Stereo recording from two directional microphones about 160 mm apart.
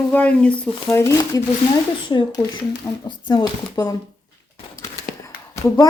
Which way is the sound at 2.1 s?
30° left (ahead or behind).